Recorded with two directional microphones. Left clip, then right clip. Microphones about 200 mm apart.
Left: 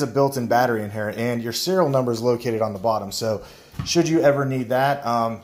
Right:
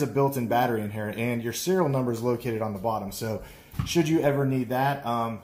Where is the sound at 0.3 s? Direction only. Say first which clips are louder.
Left 5 dB; 30° left (ahead or behind).